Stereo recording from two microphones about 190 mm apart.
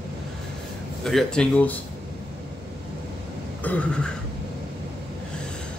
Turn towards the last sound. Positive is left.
turn(degrees=5)  # may be behind; listen again after turning